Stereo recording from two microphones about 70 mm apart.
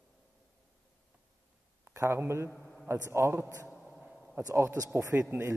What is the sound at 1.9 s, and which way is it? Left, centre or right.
Speech, right.